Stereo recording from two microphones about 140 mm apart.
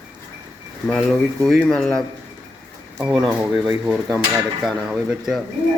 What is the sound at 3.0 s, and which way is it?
Speech, 5° right (ahead or behind).